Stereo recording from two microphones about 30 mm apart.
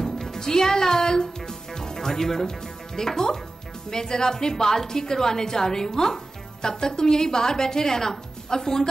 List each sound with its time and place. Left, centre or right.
0.0 s music: centre
3.0 s a woman's voice: centre